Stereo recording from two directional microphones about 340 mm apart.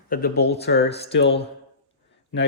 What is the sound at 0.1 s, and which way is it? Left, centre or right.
Speech, left.